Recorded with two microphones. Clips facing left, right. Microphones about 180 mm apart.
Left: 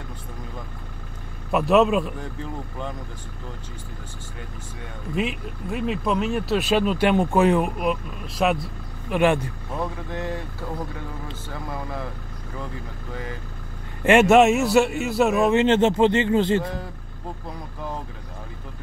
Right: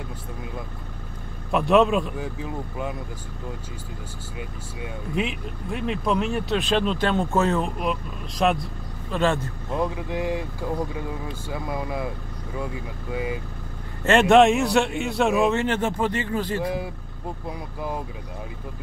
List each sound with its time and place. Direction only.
1.5 s speech: 5° left (ahead or behind)
4.4 s speech: 10° right (ahead or behind)
5.2 s speech: centre (ahead or behind)
9.8 s speech: 10° right (ahead or behind)
11.5 s speech: 10° right (ahead or behind)
13.1 s speech: 10° right (ahead or behind)
14.3 s speech: 5° left (ahead or behind)
15.5 s speech: 25° left (ahead or behind)
16.6 s speech: 10° right (ahead or behind)